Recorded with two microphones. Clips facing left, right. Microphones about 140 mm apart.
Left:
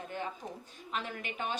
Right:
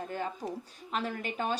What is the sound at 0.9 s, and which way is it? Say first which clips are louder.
Speech: right 4 dB; 40° right (ahead or behind).